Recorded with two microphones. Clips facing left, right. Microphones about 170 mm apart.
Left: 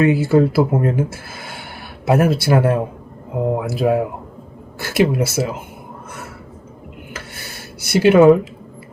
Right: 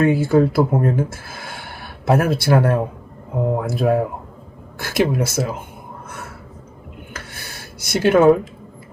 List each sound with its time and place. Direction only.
0.0 s speech: 5° left (ahead or behind)
7.5 s a sound: 60° left (ahead or behind)
7.9 s speech: 5° left (ahead or behind)